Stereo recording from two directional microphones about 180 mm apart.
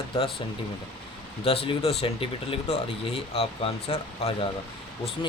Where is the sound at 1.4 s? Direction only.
30° left (ahead or behind).